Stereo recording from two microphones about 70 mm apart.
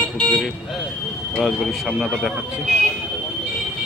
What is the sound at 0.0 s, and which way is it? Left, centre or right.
Vehicle, centre.